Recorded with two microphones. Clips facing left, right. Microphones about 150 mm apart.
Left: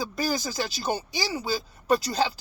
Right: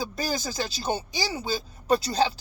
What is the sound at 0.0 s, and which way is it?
Speech, 25° right (ahead or behind).